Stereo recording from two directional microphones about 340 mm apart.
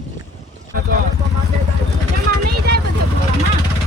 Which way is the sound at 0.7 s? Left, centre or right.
Right.